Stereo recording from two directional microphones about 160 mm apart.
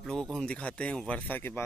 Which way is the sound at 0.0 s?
5° left (ahead or behind).